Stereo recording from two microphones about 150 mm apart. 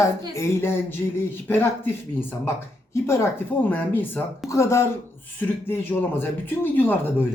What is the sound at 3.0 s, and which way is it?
A man's voice, 20° left (ahead or behind).